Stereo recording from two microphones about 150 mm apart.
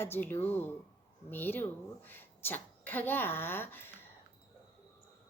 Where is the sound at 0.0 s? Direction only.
15° left (ahead or behind).